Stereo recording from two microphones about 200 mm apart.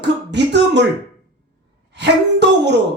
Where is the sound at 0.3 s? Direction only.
60° right (ahead or behind).